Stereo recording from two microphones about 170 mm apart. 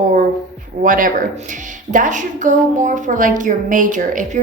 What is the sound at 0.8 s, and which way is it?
A woman's voice, 55° right (ahead or behind).